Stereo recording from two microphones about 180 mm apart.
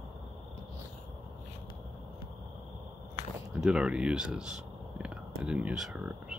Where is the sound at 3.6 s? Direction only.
5° right (ahead or behind).